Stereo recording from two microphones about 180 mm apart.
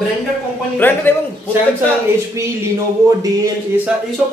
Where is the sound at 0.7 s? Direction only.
10° left (ahead or behind).